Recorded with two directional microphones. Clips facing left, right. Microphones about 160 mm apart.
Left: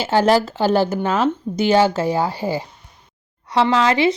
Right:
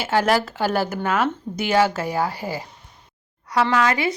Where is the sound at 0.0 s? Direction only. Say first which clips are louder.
Left 4 dB; 30° left (ahead or behind).